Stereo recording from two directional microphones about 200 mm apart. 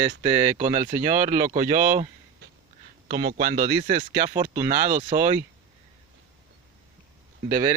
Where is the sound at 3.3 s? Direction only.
40° right (ahead or behind).